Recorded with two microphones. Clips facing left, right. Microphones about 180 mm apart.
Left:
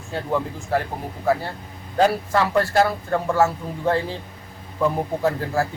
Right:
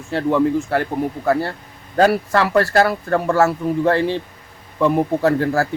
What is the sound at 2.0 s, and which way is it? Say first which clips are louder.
Speech: right 3 dB; 70° right (ahead or behind).